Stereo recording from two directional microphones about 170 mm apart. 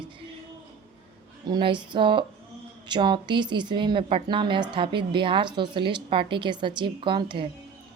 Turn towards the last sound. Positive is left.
turn(degrees=-30)  # may be behind; listen again after turning